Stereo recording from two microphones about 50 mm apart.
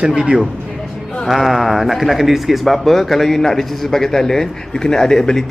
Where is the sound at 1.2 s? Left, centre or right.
Centre.